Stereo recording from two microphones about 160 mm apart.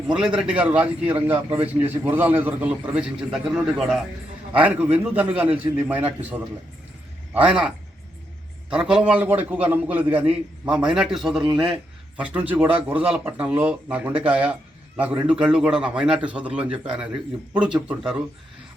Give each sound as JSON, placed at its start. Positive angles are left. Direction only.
{"t": 0.1, "sound": "a man's voice", "side_deg": -5}
{"t": 7.3, "sound": "a man's voice", "side_deg": -5}
{"t": 8.7, "sound": "a man's voice", "side_deg": -5}